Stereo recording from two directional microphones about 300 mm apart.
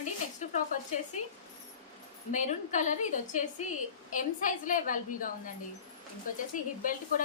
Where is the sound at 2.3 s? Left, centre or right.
Left.